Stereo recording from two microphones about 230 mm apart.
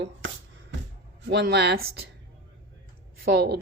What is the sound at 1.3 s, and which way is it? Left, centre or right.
Speech, right.